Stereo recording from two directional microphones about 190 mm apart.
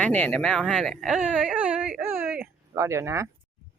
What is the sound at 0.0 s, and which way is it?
Speech, 10° left (ahead or behind).